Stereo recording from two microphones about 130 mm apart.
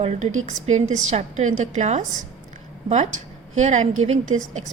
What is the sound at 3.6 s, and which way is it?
Speech, 65° right (ahead or behind).